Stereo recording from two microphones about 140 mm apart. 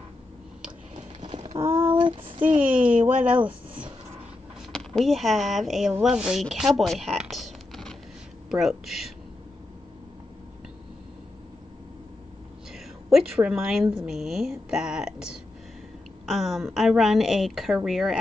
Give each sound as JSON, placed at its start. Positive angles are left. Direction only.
{"t": 0.9, "sound": "a sound", "side_deg": -50}
{"t": 1.9, "sound": "child singing", "side_deg": -35}
{"t": 2.6, "sound": "speech", "side_deg": -10}
{"t": 2.9, "sound": "speech", "side_deg": -70}
{"t": 3.3, "sound": "speech", "side_deg": -10}
{"t": 4.7, "sound": "a woman's voice", "side_deg": 0}
{"t": 12.7, "sound": "a woman's voice", "side_deg": -5}